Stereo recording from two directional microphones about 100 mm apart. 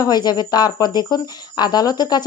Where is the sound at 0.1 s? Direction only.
45° left (ahead or behind).